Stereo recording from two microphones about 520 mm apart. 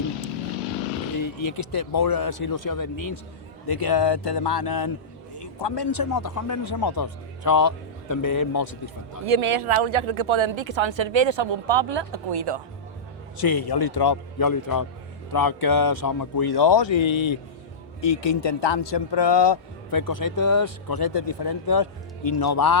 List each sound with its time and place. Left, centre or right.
1.4 s speech: left
1.7 s a man's voice: left
9.3 s speech: right
13.4 s a man's voice: left